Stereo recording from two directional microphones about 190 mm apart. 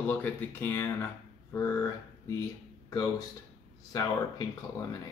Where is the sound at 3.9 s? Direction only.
20° left (ahead or behind).